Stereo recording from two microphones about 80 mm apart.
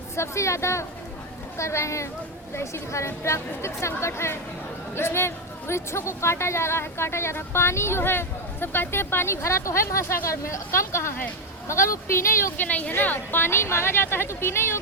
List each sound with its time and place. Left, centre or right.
0.2 s a woman's voice: left
12.6 s a woman's voice: centre